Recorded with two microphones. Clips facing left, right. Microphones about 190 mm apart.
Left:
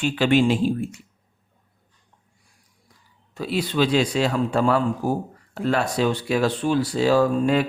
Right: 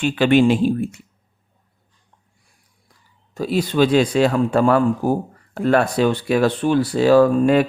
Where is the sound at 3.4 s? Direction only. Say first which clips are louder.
Right 5 dB; 45° right (ahead or behind).